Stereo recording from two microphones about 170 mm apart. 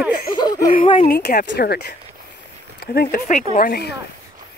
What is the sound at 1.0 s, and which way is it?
Speech, 65° left (ahead or behind).